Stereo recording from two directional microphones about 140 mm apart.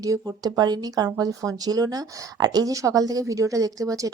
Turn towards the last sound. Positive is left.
turn(degrees=-25)  # may be behind; listen again after turning